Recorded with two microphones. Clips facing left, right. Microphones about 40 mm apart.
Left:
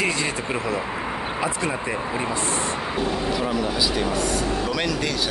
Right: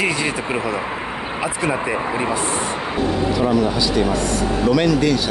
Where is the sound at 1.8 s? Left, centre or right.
Right.